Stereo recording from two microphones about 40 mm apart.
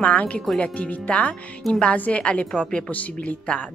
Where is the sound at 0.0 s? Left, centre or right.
Left.